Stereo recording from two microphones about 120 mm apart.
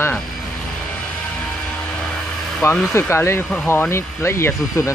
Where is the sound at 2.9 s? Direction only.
20° left (ahead or behind).